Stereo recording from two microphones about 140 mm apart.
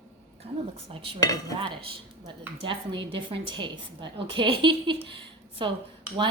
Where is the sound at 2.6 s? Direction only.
35° right (ahead or behind).